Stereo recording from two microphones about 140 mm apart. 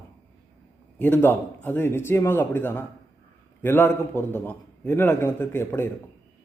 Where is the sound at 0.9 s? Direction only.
15° left (ahead or behind).